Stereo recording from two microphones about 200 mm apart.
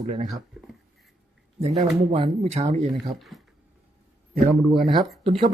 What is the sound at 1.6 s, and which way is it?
Speech, 30° right (ahead or behind).